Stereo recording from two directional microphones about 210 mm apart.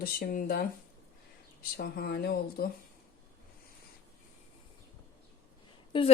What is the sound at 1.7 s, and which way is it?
Speech, 45° left (ahead or behind).